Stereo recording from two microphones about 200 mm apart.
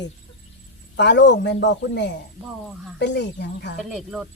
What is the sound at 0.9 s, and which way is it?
A man's voice, 60° left (ahead or behind).